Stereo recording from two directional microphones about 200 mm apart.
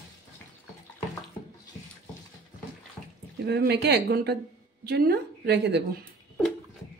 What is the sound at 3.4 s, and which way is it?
A woman's voice, 55° right (ahead or behind).